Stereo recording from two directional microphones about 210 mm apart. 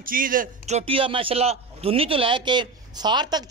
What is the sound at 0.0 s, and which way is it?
A man's voice, 40° right (ahead or behind).